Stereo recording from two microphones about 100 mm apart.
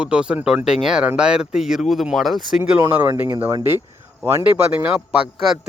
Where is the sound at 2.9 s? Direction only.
15° right (ahead or behind).